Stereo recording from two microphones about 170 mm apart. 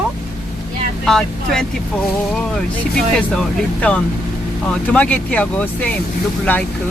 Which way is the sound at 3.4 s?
5° left (ahead or behind).